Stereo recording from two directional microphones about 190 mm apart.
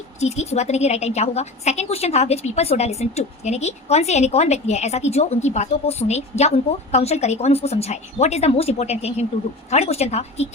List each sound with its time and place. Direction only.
0.2 s speech: 35° left (ahead or behind)